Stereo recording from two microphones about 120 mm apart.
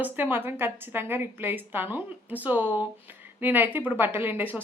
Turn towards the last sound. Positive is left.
turn(degrees=-15)  # may be behind; listen again after turning